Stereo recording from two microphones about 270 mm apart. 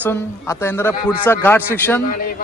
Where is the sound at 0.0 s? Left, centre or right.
Centre.